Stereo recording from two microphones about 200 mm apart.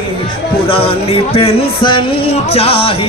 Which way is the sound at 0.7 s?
30° left (ahead or behind).